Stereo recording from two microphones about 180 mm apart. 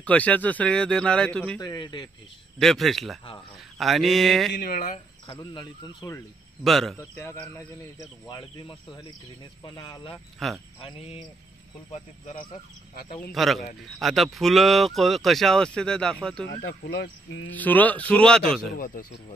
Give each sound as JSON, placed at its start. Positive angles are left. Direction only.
{"t": 0.0, "sound": "speech", "side_deg": 10}
{"t": 1.6, "sound": "speech", "side_deg": 25}
{"t": 2.6, "sound": "speech", "side_deg": 0}
{"t": 4.6, "sound": "speech", "side_deg": 50}
{"t": 4.9, "sound": "speech", "side_deg": 25}
{"t": 6.6, "sound": "speech", "side_deg": 0}
{"t": 7.0, "sound": "speech", "side_deg": 15}
{"t": 10.4, "sound": "speech", "side_deg": 0}
{"t": 10.8, "sound": "speech", "side_deg": 30}
{"t": 13.3, "sound": "speech", "side_deg": 0}
{"t": 16.4, "sound": "speech", "side_deg": 70}
{"t": 17.5, "sound": "speech", "side_deg": 10}
{"t": 18.8, "sound": "speech", "side_deg": 50}